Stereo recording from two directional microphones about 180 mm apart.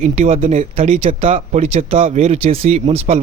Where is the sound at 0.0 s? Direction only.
35° right (ahead or behind).